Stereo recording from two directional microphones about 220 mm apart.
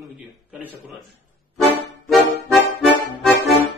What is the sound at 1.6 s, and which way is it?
Music, centre (ahead or behind).